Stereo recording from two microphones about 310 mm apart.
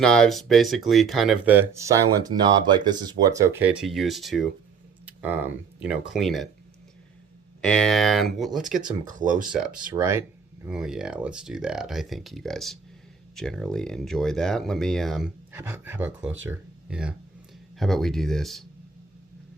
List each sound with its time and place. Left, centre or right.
0.0 s speech: centre
7.6 s speech: centre
9.1 s speech: right
9.5 s speech: centre